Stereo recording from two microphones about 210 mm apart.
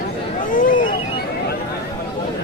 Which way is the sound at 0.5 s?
40° left (ahead or behind).